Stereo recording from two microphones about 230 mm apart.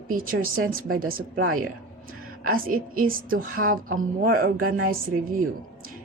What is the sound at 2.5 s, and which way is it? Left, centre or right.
Speech, right.